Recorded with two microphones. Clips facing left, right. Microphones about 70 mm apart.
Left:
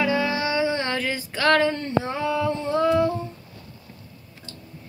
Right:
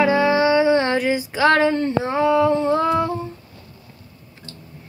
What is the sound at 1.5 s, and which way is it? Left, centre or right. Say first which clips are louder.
Female singing: right 1 dB; right.